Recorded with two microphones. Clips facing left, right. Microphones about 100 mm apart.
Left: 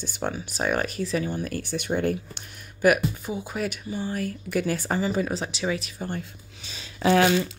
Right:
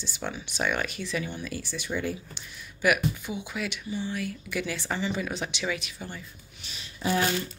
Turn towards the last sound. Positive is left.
turn(degrees=90)